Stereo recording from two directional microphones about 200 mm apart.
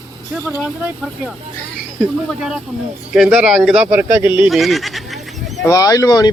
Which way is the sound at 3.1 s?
Centre (ahead or behind).